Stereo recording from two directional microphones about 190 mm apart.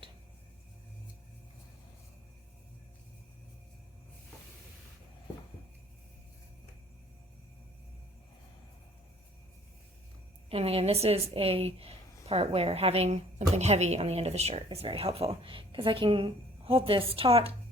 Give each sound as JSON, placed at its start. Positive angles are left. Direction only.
{"t": 10.5, "sound": "a woman's voice", "side_deg": -30}